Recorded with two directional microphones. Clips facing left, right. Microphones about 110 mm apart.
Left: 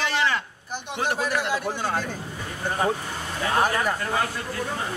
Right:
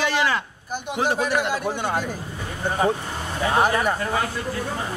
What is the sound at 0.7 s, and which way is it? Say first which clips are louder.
A man's voice: right 4 dB; 10° right (ahead or behind).